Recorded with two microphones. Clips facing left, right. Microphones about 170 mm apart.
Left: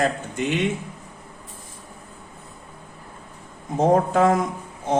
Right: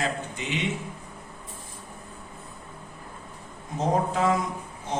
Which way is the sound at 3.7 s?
55° left (ahead or behind).